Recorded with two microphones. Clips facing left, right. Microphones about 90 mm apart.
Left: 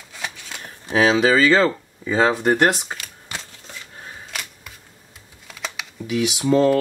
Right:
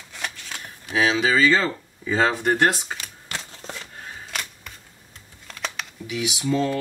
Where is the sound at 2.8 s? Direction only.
5° left (ahead or behind).